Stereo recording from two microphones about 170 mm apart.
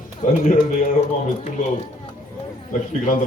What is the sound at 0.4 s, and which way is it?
Speech, 45° left (ahead or behind).